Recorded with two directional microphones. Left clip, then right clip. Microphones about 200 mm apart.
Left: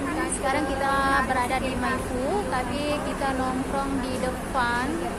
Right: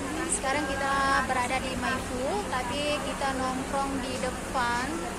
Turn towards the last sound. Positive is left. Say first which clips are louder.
# left 3 dB
turn(degrees=-10)  # may be behind; listen again after turning